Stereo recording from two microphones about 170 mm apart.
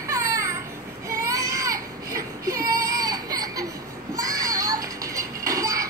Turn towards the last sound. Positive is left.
turn(degrees=-20)  # may be behind; listen again after turning